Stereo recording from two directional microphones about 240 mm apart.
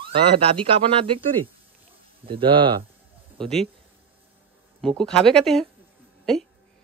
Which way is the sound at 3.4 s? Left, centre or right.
Centre.